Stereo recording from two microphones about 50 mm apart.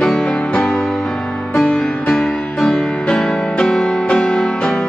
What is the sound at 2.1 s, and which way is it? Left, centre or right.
Music, centre.